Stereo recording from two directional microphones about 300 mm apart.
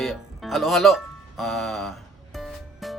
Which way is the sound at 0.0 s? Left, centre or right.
Centre.